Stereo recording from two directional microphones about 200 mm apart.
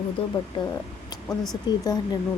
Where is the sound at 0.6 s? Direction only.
25° left (ahead or behind).